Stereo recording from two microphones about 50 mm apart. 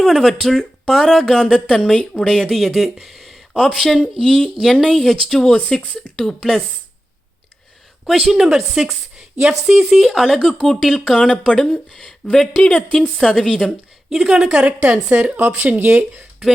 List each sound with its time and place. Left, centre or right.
0.0 s speech: centre
3.0 s a sound: centre
3.6 s speech: centre
4.2 s speech: centre
6.0 s speech: centre
8.0 s a woman's voice: centre
10.2 s speech: centre
11.2 s speech: centre
12.7 s speech: left
13.1 s speech: centre
14.3 s a woman's voice: centre; by 16.2 s right